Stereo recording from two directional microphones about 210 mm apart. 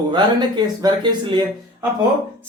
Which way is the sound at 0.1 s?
20° right (ahead or behind).